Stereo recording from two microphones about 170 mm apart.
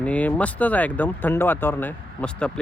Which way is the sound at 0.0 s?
10° left (ahead or behind).